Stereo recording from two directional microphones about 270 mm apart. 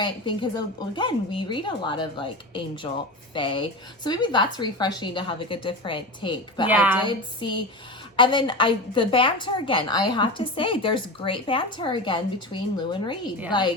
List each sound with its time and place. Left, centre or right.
0.0 s a woman's voice: centre
6.7 s a woman's voice: centre
7.0 s a woman's voice: centre